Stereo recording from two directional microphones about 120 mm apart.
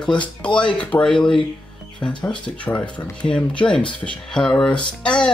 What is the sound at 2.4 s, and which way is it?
Speech, 10° left (ahead or behind).